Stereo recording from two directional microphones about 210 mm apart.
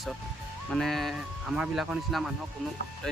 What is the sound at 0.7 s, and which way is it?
Speech, centre (ahead or behind).